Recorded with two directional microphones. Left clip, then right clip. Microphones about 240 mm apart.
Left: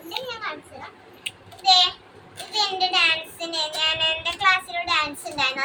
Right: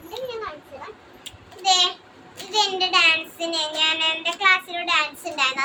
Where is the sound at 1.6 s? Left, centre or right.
Right.